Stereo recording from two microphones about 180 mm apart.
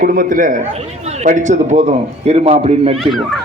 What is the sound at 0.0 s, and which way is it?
A man's voice, 50° right (ahead or behind).